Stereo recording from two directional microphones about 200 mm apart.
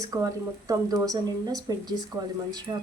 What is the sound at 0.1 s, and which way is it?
Speech, 15° right (ahead or behind).